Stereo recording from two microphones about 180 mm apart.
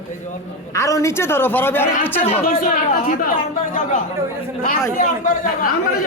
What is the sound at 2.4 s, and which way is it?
Speech, 45° left (ahead or behind).